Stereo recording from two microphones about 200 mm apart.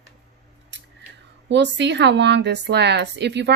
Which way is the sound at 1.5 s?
60° right (ahead or behind).